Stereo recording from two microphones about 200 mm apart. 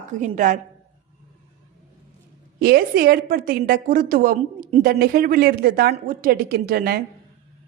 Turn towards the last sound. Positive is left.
turn(degrees=-50)  # may be behind; listen again after turning